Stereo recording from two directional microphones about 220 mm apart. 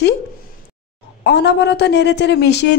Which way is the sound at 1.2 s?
50° left (ahead or behind).